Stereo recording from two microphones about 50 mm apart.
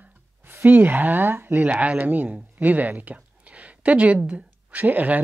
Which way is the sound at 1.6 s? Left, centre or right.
Right.